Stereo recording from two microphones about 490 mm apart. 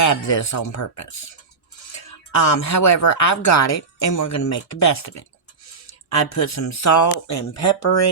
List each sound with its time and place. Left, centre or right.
0.0 s speech: left
2.4 s speech: left
6.3 s speech: left